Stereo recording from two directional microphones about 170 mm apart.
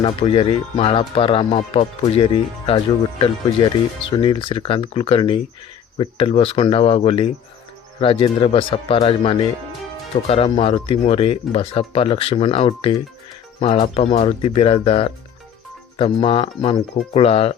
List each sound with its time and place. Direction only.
0.0 s speech: 30° left (ahead or behind)